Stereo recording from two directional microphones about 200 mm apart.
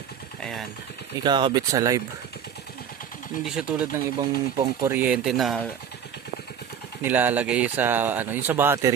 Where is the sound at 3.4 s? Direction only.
5° right (ahead or behind).